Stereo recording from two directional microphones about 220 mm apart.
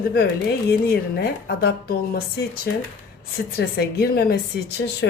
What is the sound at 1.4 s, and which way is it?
A woman's voice, 45° left (ahead or behind).